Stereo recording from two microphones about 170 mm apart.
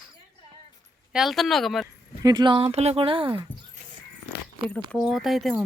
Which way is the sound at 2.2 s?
25° right (ahead or behind).